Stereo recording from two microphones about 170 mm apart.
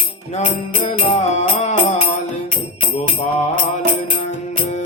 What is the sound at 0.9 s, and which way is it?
Music, 35° left (ahead or behind).